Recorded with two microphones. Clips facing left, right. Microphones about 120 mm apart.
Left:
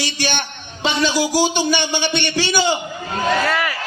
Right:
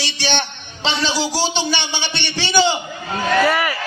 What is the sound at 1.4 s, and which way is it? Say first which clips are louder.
A man's voice: left 3 dB; 45° left (ahead or behind).